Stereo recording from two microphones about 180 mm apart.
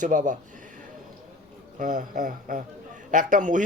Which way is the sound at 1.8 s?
45° right (ahead or behind).